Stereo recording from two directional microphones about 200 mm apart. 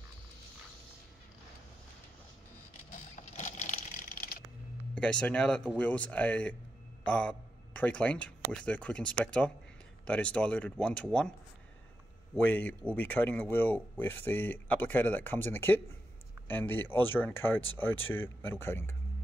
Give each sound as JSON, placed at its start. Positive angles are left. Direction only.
{"t": 2.9, "sound": "sewing machine", "side_deg": 40}
{"t": 4.9, "sound": "a man's voice", "side_deg": 5}
{"t": 12.4, "sound": "speech", "side_deg": 10}